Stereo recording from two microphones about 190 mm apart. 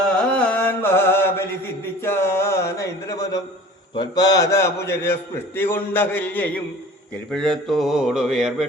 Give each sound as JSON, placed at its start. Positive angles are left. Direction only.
{"t": 0.0, "sound": "music", "side_deg": 5}
{"t": 2.0, "sound": "a sound", "side_deg": 15}
{"t": 3.9, "sound": "a man's voice", "side_deg": 20}